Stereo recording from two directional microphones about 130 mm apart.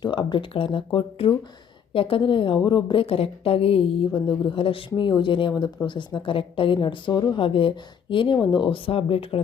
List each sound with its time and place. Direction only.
0.0 s speech: 35° left (ahead or behind)
1.9 s a woman's voice: 45° left (ahead or behind)